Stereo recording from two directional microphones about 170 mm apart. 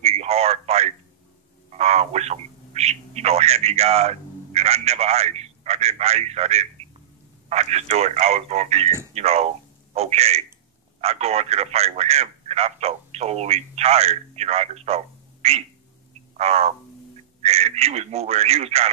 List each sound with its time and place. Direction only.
0.0 s radio: 40° right (ahead or behind)
1.7 s speech: 40° right (ahead or behind)